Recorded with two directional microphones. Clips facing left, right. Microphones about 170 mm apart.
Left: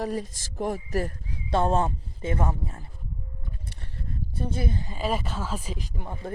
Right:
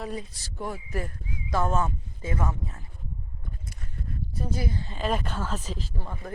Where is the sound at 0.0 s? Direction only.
40° left (ahead or behind).